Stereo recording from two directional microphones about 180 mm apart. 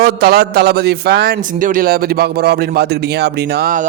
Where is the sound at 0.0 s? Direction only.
60° right (ahead or behind).